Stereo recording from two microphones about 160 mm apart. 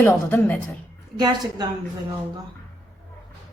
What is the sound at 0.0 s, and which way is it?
Speech, 15° left (ahead or behind).